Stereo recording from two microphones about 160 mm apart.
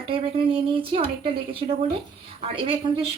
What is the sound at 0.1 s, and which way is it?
Speech, 35° right (ahead or behind).